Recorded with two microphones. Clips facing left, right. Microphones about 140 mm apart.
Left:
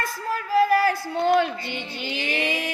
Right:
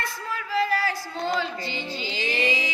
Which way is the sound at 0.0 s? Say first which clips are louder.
Left 4 dB; 45° left (ahead or behind).